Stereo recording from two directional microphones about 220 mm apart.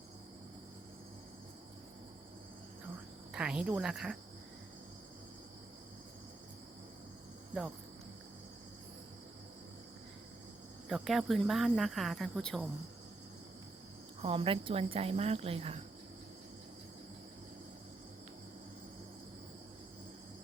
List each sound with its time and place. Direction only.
3.3 s speech: 5° right (ahead or behind)
10.8 s speech: centre (ahead or behind)
14.2 s speech: 25° right (ahead or behind)